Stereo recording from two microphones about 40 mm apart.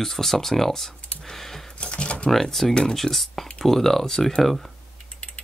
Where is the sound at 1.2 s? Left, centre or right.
Centre.